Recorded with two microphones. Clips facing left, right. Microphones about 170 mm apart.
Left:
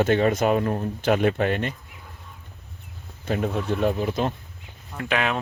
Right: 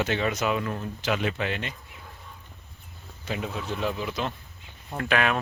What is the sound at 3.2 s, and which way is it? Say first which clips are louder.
Speech: left 7 dB; 50° left (ahead or behind).